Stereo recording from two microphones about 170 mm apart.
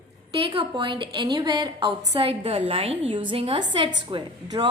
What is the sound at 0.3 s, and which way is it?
A woman's voice, 30° right (ahead or behind).